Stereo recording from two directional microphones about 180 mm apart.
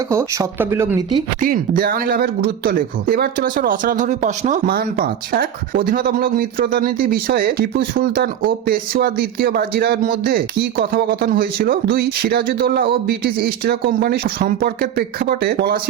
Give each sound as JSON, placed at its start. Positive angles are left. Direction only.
{"t": 0.1, "sound": "speech", "side_deg": -15}
{"t": 1.4, "sound": "speech", "side_deg": -50}